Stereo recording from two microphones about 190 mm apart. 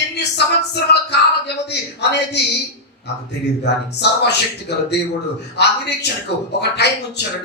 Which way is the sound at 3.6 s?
60° left (ahead or behind).